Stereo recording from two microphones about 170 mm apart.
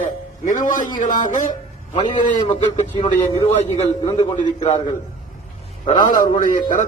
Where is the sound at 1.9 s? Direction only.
30° left (ahead or behind).